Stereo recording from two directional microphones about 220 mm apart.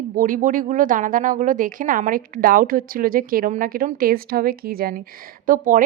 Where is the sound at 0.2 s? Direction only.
40° right (ahead or behind).